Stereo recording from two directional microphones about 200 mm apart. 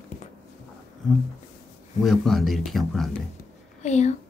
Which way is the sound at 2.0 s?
Centre (ahead or behind).